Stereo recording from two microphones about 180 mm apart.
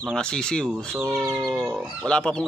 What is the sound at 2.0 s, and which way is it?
Speech, 5° left (ahead or behind).